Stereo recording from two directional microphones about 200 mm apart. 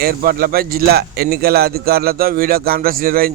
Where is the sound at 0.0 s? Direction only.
45° right (ahead or behind).